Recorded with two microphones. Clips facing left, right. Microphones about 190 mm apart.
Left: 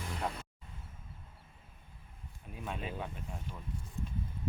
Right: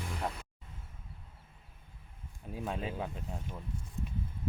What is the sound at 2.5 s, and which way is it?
Speech, 30° right (ahead or behind).